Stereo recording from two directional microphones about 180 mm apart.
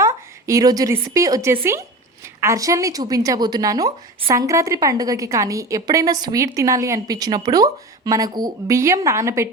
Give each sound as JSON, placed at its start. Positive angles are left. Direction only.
{"t": 0.0, "sound": "a woman's voice", "side_deg": -15}